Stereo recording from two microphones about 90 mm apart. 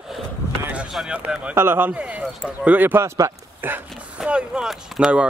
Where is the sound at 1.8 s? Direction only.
15° right (ahead or behind); by 3.3 s 35° right (ahead or behind).